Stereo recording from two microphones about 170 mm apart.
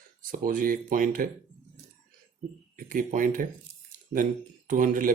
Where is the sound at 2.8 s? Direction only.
55° right (ahead or behind).